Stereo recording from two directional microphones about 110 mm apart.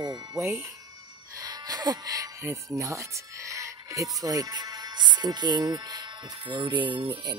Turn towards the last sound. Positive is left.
turn(degrees=-45)  # may be behind; listen again after turning